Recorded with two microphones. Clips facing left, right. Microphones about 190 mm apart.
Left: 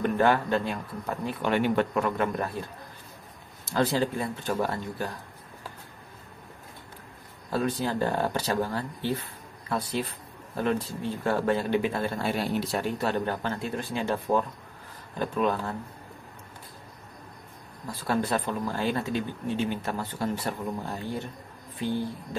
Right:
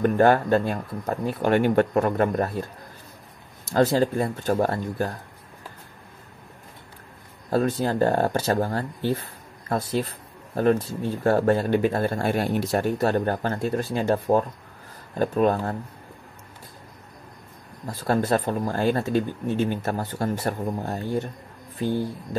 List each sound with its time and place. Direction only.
0.0 s speech: 45° right (ahead or behind)
3.6 s speech: 45° right (ahead or behind)
7.5 s speech: 45° right (ahead or behind)
18.0 s speech: 45° right (ahead or behind)